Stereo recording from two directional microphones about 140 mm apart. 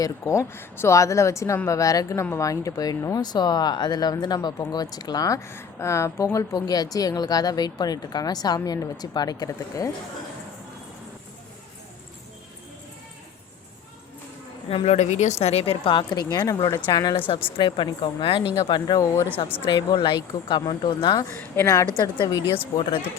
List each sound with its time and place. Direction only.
0.0 s speech: 20° left (ahead or behind)
14.7 s speech: 45° left (ahead or behind); by 19.0 s 25° left (ahead or behind)
19.1 s speech: 15° left (ahead or behind)
19.6 s speech: 30° left (ahead or behind)
21.2 s speech: 15° left (ahead or behind)
21.8 s speech: 30° left (ahead or behind)